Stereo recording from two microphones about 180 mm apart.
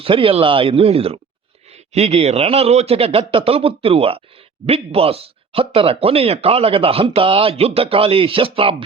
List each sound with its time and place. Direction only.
0.0 s speech: 30° right (ahead or behind)